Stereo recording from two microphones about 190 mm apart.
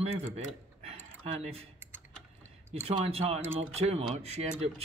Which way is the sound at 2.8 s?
30° right (ahead or behind).